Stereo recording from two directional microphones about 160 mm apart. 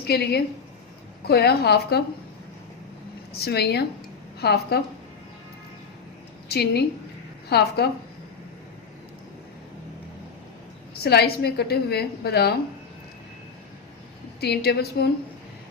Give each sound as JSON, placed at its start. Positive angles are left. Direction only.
{"t": 0.0, "sound": "a woman's voice", "side_deg": 85}
{"t": 3.3, "sound": "a woman's voice", "side_deg": 85}
{"t": 6.5, "sound": "a woman's voice", "side_deg": 85}
{"t": 11.0, "sound": "a woman's voice", "side_deg": 85}
{"t": 14.4, "sound": "a woman's voice", "side_deg": 85}